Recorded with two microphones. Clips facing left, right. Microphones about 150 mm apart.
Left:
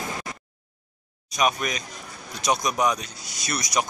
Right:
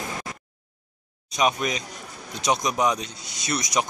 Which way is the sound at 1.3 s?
25° right (ahead or behind).